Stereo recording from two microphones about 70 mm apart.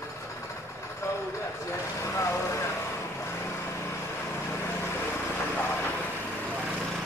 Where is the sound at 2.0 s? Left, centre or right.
Left.